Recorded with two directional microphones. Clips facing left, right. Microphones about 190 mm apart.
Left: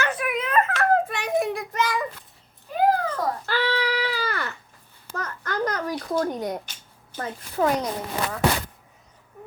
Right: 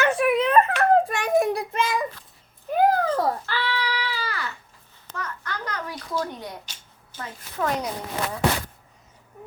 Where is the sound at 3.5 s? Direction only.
45° left (ahead or behind).